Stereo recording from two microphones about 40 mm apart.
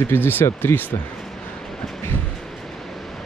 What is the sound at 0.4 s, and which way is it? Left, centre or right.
Speech, left.